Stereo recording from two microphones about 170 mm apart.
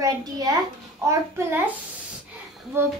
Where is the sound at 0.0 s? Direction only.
20° right (ahead or behind).